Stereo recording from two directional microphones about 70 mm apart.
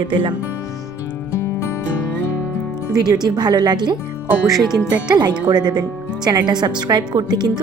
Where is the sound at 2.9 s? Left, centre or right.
Right.